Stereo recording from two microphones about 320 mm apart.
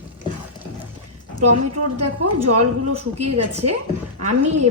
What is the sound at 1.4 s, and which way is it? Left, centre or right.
Speech, right.